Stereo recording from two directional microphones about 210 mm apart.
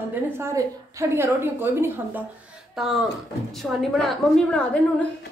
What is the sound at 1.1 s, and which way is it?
A woman's voice, 10° right (ahead or behind).